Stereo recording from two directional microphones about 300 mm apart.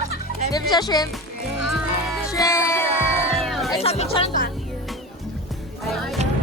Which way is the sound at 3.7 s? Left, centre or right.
Centre.